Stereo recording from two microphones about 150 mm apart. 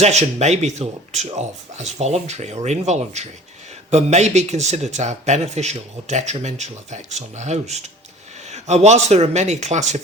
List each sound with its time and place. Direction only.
0.0 s speech: 45° right (ahead or behind)